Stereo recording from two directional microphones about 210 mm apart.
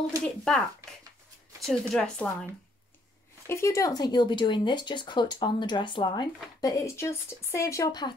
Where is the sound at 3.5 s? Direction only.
15° left (ahead or behind).